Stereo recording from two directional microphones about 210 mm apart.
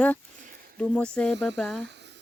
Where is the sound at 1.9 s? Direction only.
55° right (ahead or behind).